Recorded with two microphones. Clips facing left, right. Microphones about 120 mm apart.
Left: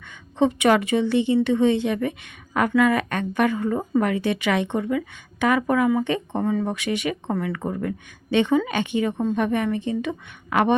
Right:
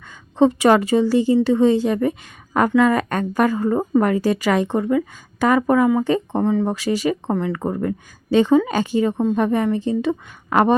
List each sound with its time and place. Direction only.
0.1 s a woman's voice: 35° right (ahead or behind)
6.4 s speech: 20° right (ahead or behind)
6.7 s a woman's voice: 35° right (ahead or behind)